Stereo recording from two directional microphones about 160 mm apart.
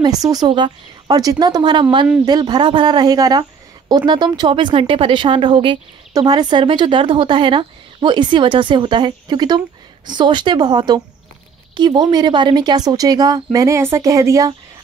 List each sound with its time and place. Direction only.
0.0 s speech: 25° right (ahead or behind)